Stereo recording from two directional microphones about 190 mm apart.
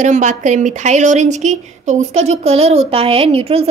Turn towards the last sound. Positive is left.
turn(degrees=-30)  # may be behind; listen again after turning